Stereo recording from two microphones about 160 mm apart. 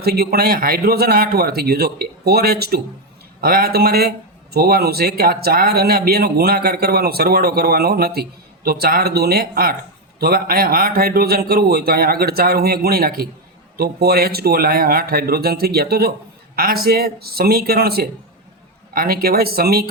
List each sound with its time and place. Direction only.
0.0 s speech: 80° right
16.6 s speech: 70° right (ahead or behind)